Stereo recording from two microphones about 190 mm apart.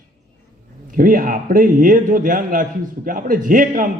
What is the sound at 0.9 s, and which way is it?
A man's voice, 45° right (ahead or behind).